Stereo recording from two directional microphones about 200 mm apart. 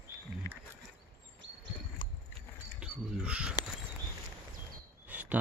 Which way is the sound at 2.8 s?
5° right (ahead or behind).